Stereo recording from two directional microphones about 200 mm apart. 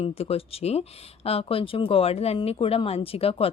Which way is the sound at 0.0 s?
30° left (ahead or behind).